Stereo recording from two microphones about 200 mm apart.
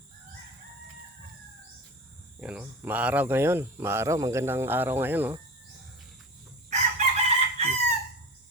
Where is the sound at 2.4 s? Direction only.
5° right (ahead or behind).